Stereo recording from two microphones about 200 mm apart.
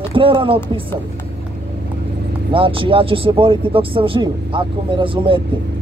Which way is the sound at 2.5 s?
25° right (ahead or behind).